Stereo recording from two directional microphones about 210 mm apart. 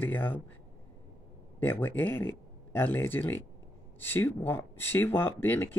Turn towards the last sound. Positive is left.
turn(degrees=10)  # may be behind; listen again after turning